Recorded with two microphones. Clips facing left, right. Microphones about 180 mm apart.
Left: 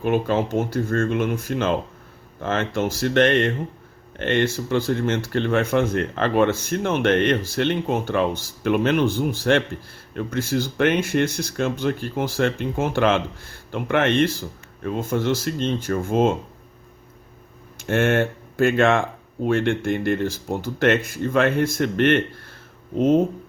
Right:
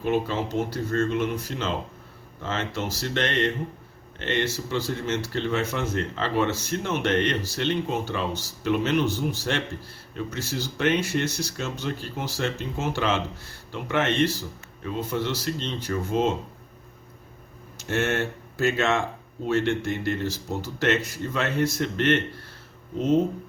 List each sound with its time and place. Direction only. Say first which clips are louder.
0.0 s speech: left 4 dB; 50° left (ahead or behind)
17.7 s speech: left 6 dB; 55° left (ahead or behind)